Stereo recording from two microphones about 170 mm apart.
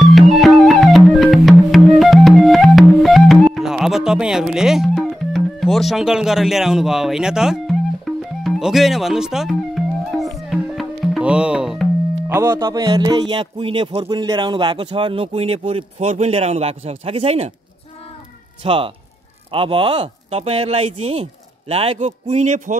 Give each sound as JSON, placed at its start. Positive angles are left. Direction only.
{"t": 0.0, "sound": "music", "side_deg": 0}
{"t": 12.4, "sound": "speech", "side_deg": -20}
{"t": 18.6, "sound": "speech", "side_deg": -30}